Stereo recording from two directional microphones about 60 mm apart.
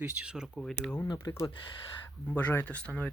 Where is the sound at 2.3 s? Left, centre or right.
Left.